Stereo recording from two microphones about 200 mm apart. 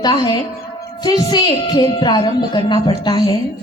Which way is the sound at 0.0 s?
20° left (ahead or behind).